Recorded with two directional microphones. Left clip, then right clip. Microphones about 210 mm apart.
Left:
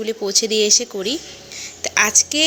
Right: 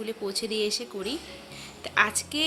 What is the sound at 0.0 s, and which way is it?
A woman's voice, 25° left (ahead or behind).